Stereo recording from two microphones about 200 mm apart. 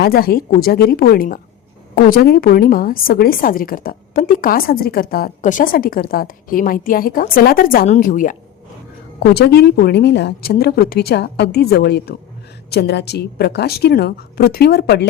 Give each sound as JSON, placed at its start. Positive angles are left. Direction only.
{"t": 0.0, "sound": "a woman's voice", "side_deg": 50}
{"t": 9.3, "sound": "a woman's voice", "side_deg": 55}